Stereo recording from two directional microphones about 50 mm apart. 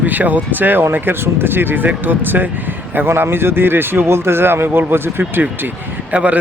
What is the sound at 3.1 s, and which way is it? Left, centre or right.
Speech, right.